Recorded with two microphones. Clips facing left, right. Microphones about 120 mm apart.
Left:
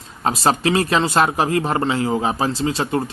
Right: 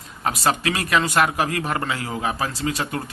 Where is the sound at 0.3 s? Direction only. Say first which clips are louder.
Left 4 dB; 30° left (ahead or behind).